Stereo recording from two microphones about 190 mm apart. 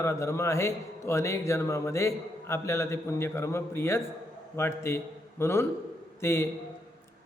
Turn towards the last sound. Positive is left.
turn(degrees=15)  # may be behind; listen again after turning